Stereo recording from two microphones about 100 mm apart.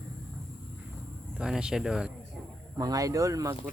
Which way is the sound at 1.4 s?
5° right (ahead or behind).